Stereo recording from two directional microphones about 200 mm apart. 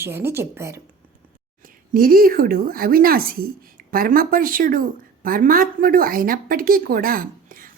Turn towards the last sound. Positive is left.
turn(degrees=-45)  # may be behind; listen again after turning